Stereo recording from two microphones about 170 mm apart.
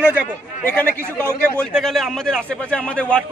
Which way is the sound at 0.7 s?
10° left (ahead or behind).